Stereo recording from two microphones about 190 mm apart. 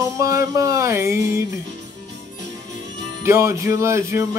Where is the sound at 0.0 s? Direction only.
15° right (ahead or behind).